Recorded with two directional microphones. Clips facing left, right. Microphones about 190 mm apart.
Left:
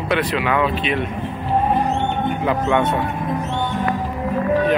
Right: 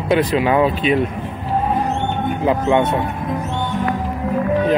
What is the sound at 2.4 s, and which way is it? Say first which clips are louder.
Speech: right 4 dB; 30° right (ahead or behind).